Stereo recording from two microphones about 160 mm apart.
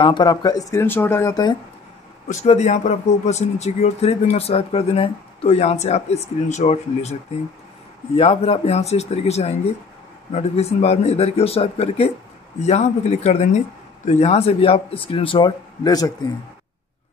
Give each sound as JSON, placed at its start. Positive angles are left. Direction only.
{"t": 0.0, "sound": "speech", "side_deg": 25}
{"t": 2.2, "sound": "speech", "side_deg": 45}
{"t": 8.2, "sound": "speech", "side_deg": 40}